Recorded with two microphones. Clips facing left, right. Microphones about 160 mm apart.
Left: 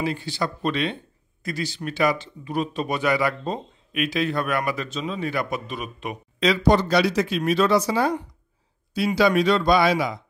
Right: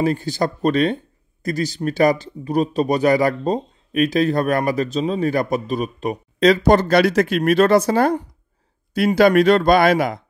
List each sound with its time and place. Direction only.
0.0 s speech: 45° right (ahead or behind)